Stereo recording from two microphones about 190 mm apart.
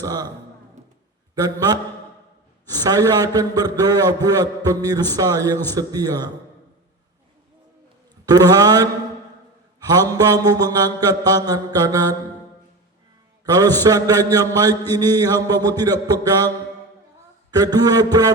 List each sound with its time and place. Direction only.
0.0 s a man's voice: 20° right (ahead or behind)
1.4 s a man's voice: 20° right (ahead or behind)
8.3 s a man's voice: 20° right (ahead or behind)
10.1 s a man's voice: 20° right (ahead or behind)
13.4 s a man's voice: 20° right (ahead or behind)
17.5 s a man's voice: 20° right (ahead or behind)